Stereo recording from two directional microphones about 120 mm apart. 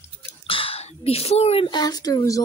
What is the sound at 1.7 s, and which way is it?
Speech, 35° left (ahead or behind).